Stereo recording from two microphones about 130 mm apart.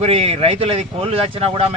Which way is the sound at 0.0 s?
50° right (ahead or behind).